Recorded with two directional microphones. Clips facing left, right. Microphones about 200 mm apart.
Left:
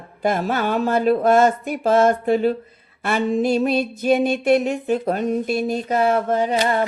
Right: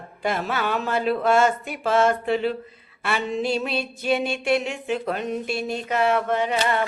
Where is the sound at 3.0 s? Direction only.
45° left (ahead or behind).